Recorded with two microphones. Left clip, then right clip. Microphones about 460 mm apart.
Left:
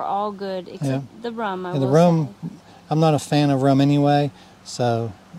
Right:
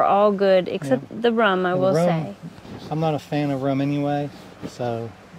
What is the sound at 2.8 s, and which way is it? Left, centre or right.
Speech, left.